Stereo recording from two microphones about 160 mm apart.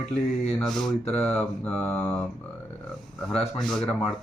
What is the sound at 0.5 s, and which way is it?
Speech, 5° left (ahead or behind).